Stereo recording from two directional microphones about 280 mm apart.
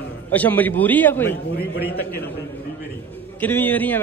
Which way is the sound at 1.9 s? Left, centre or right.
Left.